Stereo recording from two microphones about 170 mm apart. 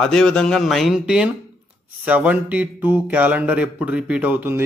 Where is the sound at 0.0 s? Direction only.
5° left (ahead or behind).